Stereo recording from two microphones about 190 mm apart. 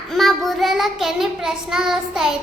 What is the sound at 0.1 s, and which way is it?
Child singing, centre (ahead or behind).